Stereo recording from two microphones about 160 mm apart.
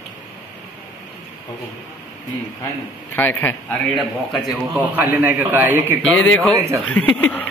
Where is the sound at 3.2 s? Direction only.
10° left (ahead or behind).